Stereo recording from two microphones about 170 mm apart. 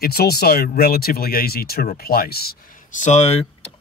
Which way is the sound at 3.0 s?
40° left (ahead or behind).